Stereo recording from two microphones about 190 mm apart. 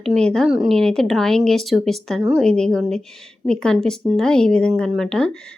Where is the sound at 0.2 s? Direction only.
5° left (ahead or behind).